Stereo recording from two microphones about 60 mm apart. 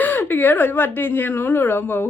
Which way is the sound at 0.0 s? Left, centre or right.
Left.